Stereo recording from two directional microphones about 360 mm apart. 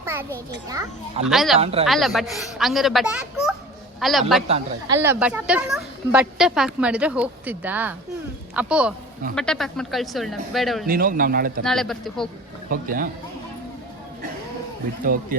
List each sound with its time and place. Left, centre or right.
0.0 s a sound: centre
0.7 s speech: centre
1.5 s speech: centre
1.9 s speech: centre
4.4 s speech: centre
4.9 s speech: centre
10.8 s speech: right
11.6 s speech: centre
12.7 s speech: right
15.0 s speech: right